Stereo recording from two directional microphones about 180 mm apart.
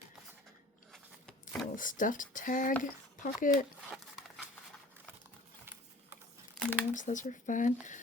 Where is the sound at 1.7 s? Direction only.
50° left (ahead or behind).